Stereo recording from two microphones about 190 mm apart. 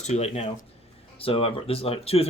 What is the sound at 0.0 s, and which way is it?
Speech, 35° left (ahead or behind).